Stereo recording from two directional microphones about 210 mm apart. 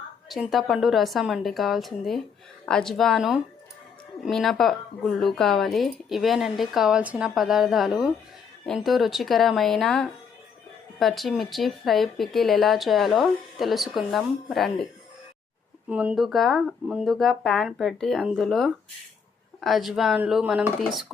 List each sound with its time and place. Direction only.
0.3 s speech: centre (ahead or behind)
15.9 s speech: 5° right (ahead or behind)